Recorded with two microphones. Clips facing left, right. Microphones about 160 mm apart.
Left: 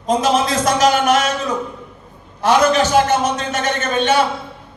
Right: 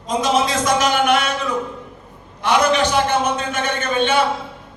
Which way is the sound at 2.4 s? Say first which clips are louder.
Left 3 dB; 40° left (ahead or behind).